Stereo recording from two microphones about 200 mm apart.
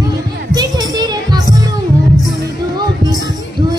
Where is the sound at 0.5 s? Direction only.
20° right (ahead or behind).